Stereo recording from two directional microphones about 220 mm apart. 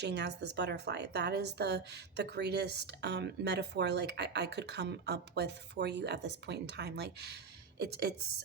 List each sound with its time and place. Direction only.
0.0 s a woman's voice: 50° right (ahead or behind)